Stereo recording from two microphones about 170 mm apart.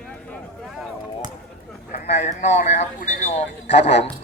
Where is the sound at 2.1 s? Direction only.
45° left (ahead or behind).